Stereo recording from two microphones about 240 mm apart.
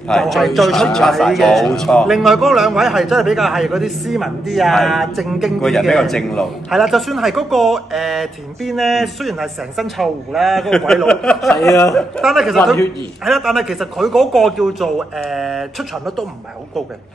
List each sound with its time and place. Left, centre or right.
0.1 s a man's voice: centre
11.9 s a man's voice: centre